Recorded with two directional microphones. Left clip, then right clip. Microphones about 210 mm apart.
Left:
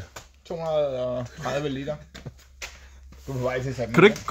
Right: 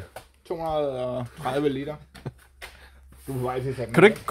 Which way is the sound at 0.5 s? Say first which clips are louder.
Left 1 dB; 40° right (ahead or behind).